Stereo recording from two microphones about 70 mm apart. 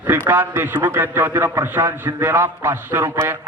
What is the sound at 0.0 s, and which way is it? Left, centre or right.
A man's voice, right.